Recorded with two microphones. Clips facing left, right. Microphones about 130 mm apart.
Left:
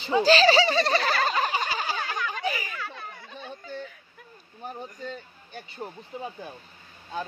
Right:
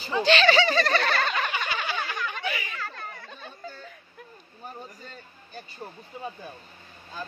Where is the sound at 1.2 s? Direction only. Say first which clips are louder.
Left 3 dB; 35° left (ahead or behind).